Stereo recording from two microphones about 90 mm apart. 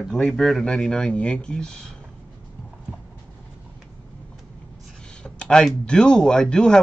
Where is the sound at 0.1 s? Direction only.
5° left (ahead or behind).